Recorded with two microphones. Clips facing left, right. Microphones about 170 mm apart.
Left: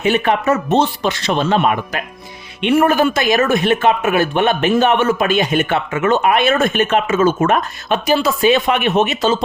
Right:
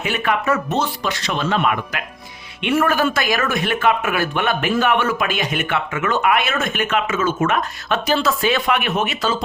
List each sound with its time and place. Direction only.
0.0 s speech: 25° left (ahead or behind)
7.9 s speech: 15° left (ahead or behind)